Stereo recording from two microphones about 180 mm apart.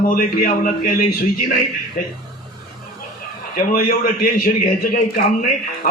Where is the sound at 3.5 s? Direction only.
55° left (ahead or behind).